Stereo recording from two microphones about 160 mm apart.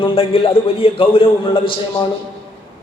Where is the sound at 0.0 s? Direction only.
35° left (ahead or behind).